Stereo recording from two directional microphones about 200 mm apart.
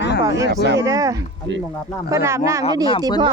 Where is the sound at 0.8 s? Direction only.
15° right (ahead or behind).